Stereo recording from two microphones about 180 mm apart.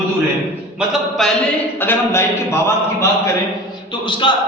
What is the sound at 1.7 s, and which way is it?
A man's voice, 10° left (ahead or behind).